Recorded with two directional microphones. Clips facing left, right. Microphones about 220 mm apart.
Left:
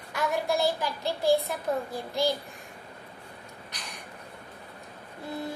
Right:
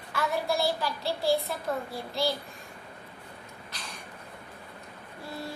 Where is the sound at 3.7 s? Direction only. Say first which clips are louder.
Right 1 dB; 15° left (ahead or behind).